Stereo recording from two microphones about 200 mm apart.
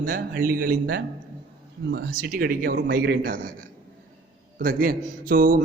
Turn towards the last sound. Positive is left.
turn(degrees=-45)  # may be behind; listen again after turning